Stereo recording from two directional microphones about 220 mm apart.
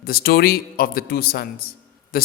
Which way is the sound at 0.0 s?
45° left (ahead or behind).